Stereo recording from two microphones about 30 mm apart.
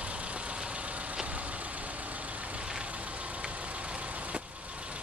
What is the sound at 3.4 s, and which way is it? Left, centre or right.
Vehicle, right.